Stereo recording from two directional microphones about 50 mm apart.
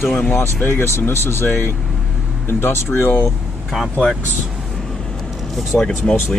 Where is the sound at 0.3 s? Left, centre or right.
Left.